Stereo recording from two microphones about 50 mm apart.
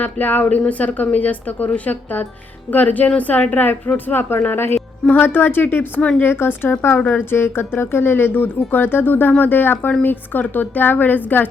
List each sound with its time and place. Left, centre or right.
0.0 s speech: left
6.0 s speech: left
6.2 s speech: left